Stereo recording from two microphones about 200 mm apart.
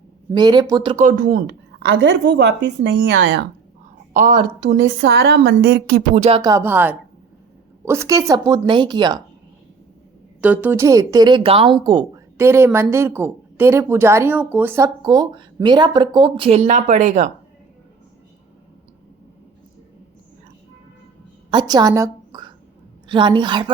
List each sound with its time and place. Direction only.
0.3 s a woman's voice: 20° right (ahead or behind)
1.0 s speech: 45° right (ahead or behind)
2.0 s speech: 60° right (ahead or behind)
4.1 s speech: 40° right (ahead or behind)
6.1 s a sound: 30° right (ahead or behind)
6.4 s a woman's voice: 15° right (ahead or behind)
10.4 s speech: 10° right (ahead or behind); by 17.2 s 35° right (ahead or behind)
21.5 s a woman's voice: 20° right (ahead or behind)